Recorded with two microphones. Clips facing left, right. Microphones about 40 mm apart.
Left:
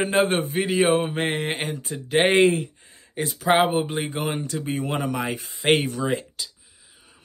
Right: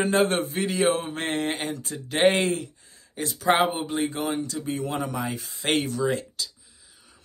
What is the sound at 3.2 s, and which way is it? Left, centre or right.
Mantra, left.